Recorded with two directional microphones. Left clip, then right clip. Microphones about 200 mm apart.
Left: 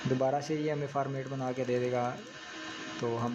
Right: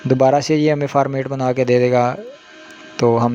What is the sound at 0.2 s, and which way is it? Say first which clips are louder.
Speech: right 18 dB; 50° right (ahead or behind).